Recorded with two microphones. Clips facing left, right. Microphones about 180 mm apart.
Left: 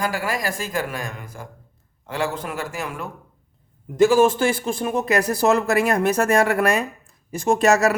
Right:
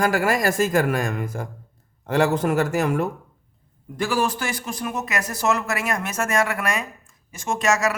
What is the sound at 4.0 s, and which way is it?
Speech, 25° left (ahead or behind).